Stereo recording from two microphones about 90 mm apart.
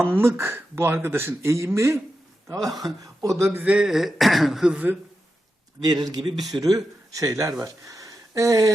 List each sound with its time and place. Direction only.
0.0 s speech: 25° right (ahead or behind)
3.6 s speech: 10° right (ahead or behind)
5.8 s speech: 50° right (ahead or behind)